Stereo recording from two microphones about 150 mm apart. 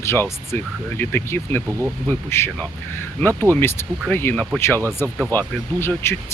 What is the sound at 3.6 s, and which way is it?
Speech, 15° left (ahead or behind).